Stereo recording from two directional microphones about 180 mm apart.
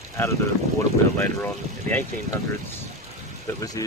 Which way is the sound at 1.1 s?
10° left (ahead or behind).